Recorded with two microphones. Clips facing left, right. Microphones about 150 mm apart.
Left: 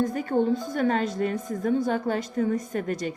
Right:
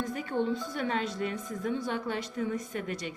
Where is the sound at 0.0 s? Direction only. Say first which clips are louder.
Left 7 dB; 45° left (ahead or behind).